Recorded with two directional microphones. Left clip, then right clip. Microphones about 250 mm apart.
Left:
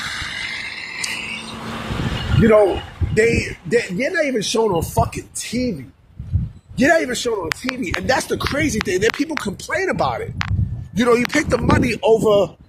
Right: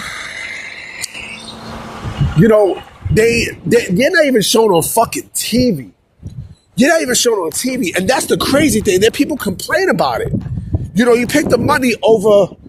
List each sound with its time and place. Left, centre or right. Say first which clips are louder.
0.0 s cricket: right 1 dB; left
1.6 s bird: left 3 dB; centre
2.4 s speech: right 3 dB; right
6.7 s speech: right 4 dB; right
10.9 s speech: right 4 dB; right